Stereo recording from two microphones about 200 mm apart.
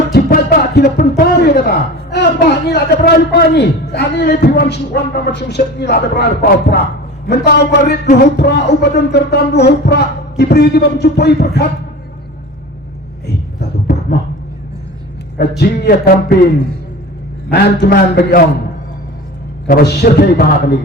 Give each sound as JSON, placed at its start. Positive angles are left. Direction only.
{"t": 0.1, "sound": "speech", "side_deg": 50}
{"t": 13.2, "sound": "a sound", "side_deg": 55}
{"t": 15.4, "sound": "a man's voice", "side_deg": 50}
{"t": 17.5, "sound": "a man's voice", "side_deg": 55}
{"t": 19.6, "sound": "a man's voice", "side_deg": 55}